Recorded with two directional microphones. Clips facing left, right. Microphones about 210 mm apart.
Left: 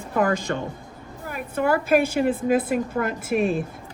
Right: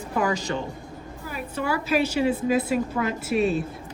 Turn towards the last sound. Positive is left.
turn(degrees=50)  # may be behind; listen again after turning